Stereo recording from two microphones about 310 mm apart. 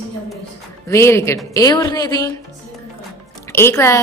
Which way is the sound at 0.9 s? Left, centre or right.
Centre.